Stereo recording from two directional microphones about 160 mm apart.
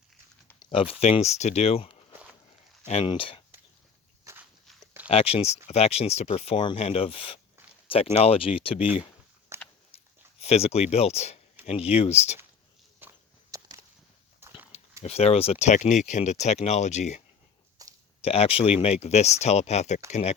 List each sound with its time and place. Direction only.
0.6 s speech: 35° left (ahead or behind)
4.2 s walk: 20° right (ahead or behind)
5.0 s speech: 35° left (ahead or behind)
9.5 s biting: 15° right (ahead or behind)
9.9 s a sound: 40° left (ahead or behind)
10.4 s speech: 40° left (ahead or behind)
13.0 s walk: 20° right (ahead or behind)
14.4 s dog: 10° right (ahead or behind)
15.0 s speech: 40° left (ahead or behind)